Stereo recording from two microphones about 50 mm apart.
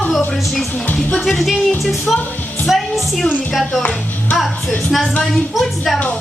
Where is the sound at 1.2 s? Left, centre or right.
Centre.